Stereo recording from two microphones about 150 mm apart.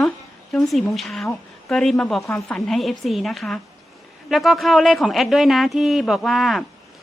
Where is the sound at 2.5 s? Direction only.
Centre (ahead or behind).